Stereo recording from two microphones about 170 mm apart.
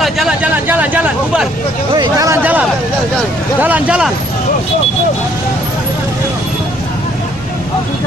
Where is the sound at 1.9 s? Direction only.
30° right (ahead or behind).